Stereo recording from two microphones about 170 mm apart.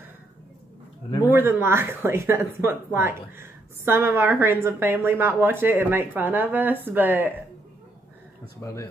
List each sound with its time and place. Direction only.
1.3 s speech: 15° right (ahead or behind)
8.5 s a man's voice: 15° left (ahead or behind)